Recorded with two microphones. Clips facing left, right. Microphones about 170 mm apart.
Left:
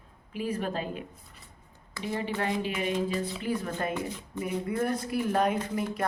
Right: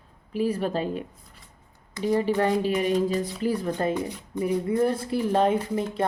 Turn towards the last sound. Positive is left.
turn(degrees=-25)  # may be behind; listen again after turning